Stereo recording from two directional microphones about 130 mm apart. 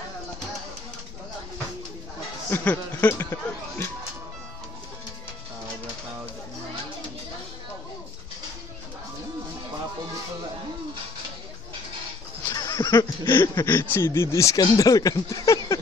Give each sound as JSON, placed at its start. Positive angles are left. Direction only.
{"t": 2.5, "sound": "speech", "side_deg": 10}
{"t": 12.4, "sound": "speech", "side_deg": 25}